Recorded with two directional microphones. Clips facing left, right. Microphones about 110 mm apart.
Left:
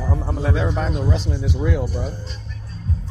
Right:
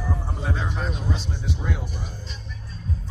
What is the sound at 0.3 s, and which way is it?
A man's voice, 90° left.